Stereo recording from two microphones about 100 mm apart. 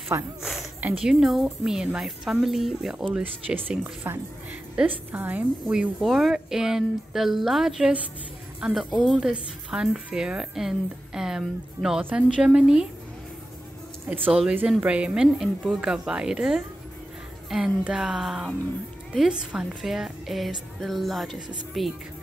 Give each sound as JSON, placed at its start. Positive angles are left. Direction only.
{"t": 0.1, "sound": "speech", "side_deg": -25}
{"t": 0.9, "sound": "a woman's voice", "side_deg": -5}
{"t": 3.1, "sound": "a woman's voice", "side_deg": -15}
{"t": 14.0, "sound": "a woman's voice", "side_deg": -15}